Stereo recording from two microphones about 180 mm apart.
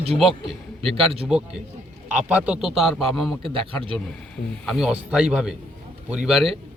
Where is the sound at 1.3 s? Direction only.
5° right (ahead or behind).